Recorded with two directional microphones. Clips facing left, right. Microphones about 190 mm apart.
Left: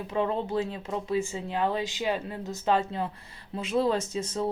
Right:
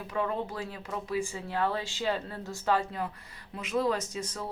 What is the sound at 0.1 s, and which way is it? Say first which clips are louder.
Speech: left 4 dB; 25° left (ahead or behind).